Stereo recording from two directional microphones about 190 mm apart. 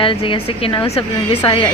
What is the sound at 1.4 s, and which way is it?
Speech, 25° left (ahead or behind).